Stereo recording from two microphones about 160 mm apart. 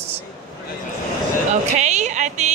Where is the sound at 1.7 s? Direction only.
45° right (ahead or behind).